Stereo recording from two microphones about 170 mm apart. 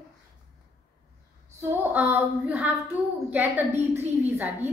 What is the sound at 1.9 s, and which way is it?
A woman's voice, 10° right (ahead or behind).